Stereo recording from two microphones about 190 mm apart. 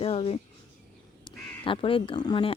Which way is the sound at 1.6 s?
25° left (ahead or behind).